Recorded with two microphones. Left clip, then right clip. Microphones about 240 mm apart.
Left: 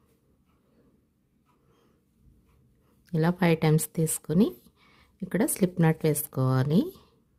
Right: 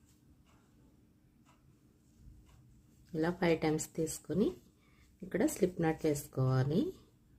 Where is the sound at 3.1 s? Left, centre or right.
Left.